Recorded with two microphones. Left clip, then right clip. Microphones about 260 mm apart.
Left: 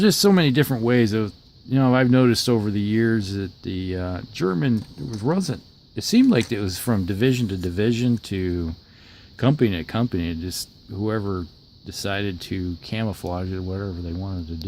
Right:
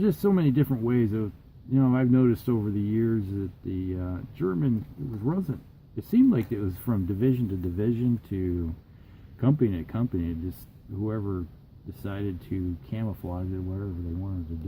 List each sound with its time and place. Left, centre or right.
0.0 s speech: left